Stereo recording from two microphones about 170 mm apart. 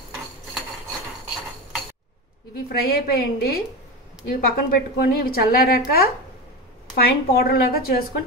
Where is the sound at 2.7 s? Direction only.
65° left (ahead or behind).